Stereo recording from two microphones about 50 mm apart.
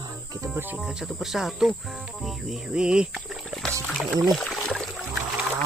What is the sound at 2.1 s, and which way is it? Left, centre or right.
Cricket, centre.